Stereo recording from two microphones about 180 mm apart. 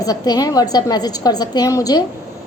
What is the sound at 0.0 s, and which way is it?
A woman's voice, 20° left (ahead or behind).